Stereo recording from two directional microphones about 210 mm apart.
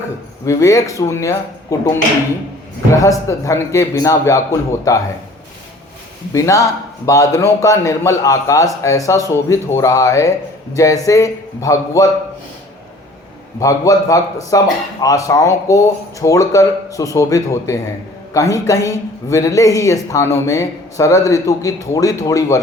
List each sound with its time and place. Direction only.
0.4 s speech: 15° left (ahead or behind)
2.9 s speech: 15° left (ahead or behind)
6.3 s speech: 15° left (ahead or behind)
13.6 s speech: 15° left (ahead or behind)